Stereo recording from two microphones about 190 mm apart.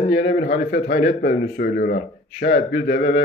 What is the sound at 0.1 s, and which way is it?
Speech, 60° left (ahead or behind).